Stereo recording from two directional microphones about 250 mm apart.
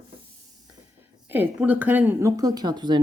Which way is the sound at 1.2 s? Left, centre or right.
Centre.